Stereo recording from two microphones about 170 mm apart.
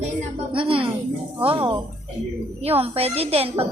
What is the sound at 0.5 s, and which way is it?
Speech, 30° right (ahead or behind).